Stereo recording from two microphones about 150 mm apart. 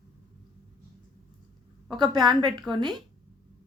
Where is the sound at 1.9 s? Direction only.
30° right (ahead or behind).